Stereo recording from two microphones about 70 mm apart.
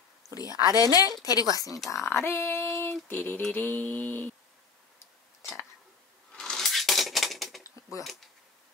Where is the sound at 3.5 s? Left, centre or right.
Left.